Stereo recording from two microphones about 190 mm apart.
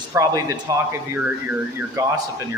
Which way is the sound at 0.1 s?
15° right (ahead or behind).